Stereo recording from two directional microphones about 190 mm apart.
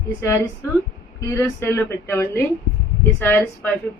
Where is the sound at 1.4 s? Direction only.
10° left (ahead or behind).